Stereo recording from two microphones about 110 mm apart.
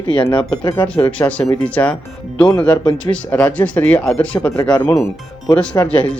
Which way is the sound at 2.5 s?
45° left (ahead or behind).